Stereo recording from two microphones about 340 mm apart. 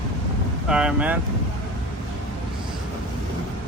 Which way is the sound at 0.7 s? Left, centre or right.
Centre.